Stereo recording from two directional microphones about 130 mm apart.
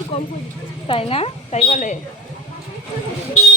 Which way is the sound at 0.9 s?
45° left (ahead or behind).